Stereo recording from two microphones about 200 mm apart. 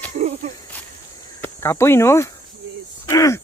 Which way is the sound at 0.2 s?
35° right (ahead or behind).